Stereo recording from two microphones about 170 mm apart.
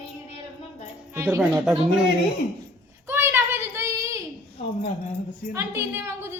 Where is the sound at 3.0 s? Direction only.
15° right (ahead or behind).